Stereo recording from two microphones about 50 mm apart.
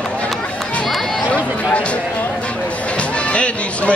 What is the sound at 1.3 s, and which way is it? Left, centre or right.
Run, left.